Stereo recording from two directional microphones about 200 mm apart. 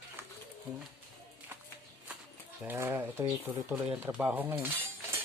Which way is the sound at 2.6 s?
10° right (ahead or behind).